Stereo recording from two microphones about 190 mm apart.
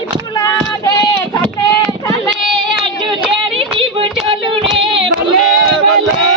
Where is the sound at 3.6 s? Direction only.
30° right (ahead or behind).